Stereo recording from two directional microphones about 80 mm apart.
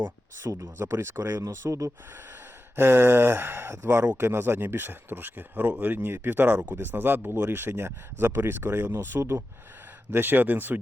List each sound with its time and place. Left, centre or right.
0.3 s speech: right
2.7 s speech: right
4.0 s speech: centre
4.3 s speech: right